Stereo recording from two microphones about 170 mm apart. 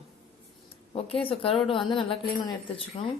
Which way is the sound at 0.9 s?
35° left (ahead or behind).